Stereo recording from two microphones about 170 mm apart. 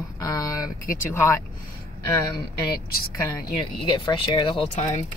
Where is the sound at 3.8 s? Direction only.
25° left (ahead or behind).